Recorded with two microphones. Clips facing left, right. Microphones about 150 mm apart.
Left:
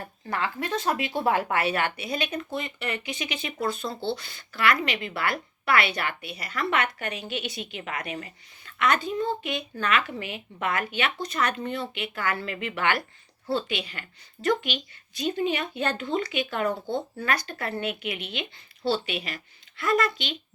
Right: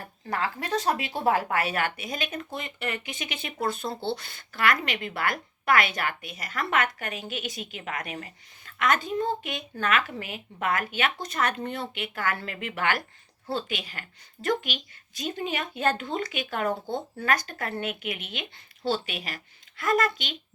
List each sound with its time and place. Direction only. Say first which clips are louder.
0.3 s speech: even; 35° right (ahead or behind)